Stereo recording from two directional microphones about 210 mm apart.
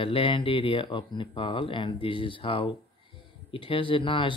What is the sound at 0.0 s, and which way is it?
Speech, 25° left (ahead or behind).